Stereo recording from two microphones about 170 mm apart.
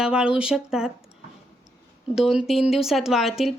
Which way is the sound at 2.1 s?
5° right (ahead or behind).